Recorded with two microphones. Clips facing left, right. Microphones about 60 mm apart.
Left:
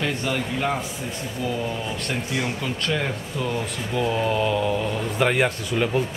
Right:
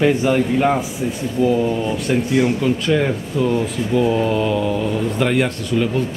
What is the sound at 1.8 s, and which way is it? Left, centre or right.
A man's voice, centre.